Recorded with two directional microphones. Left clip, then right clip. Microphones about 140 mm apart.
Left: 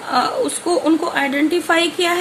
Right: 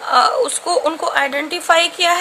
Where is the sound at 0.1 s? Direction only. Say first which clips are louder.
Right 4 dB; 35° right (ahead or behind).